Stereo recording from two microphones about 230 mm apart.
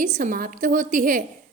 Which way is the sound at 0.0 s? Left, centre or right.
Right.